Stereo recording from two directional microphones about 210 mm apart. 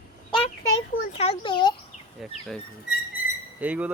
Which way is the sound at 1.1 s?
25° left (ahead or behind).